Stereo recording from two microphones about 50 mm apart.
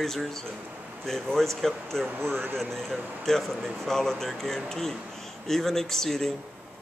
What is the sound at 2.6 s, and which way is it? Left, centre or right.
Speech, centre.